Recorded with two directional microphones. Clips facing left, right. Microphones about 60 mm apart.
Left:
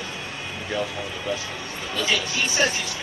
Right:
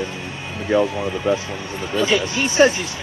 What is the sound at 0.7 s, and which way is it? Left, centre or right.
Speech, right.